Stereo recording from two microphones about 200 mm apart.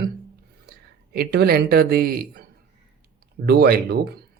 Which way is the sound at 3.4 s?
50° right (ahead or behind).